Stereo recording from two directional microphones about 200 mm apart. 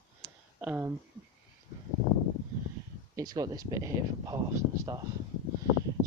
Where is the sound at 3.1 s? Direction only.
20° right (ahead or behind).